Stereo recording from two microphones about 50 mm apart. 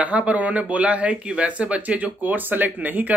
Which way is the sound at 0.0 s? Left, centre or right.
Right.